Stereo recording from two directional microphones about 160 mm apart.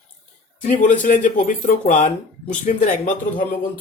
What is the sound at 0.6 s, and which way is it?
Speech, 55° left (ahead or behind).